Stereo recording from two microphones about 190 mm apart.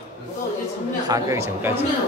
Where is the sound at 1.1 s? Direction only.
15° right (ahead or behind).